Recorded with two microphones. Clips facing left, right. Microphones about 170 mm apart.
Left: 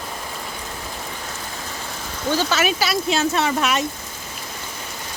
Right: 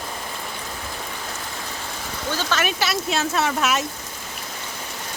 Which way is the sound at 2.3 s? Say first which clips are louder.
Left 4 dB; 10° left (ahead or behind).